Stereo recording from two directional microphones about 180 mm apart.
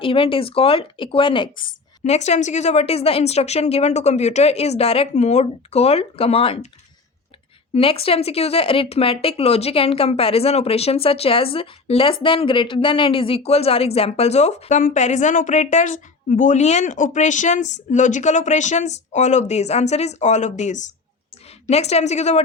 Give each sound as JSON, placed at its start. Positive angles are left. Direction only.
{"t": 0.0, "sound": "a woman's voice", "side_deg": 30}
{"t": 2.0, "sound": "speech", "side_deg": 40}
{"t": 7.7, "sound": "speech", "side_deg": 30}